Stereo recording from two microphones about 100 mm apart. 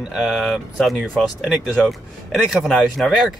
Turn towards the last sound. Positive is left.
turn(degrees=0)  # may be behind; listen again after turning